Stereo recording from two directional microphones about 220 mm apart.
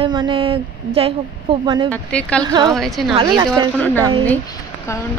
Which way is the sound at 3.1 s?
15° right (ahead or behind).